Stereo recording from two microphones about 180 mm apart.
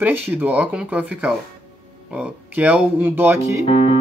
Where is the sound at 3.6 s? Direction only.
30° left (ahead or behind).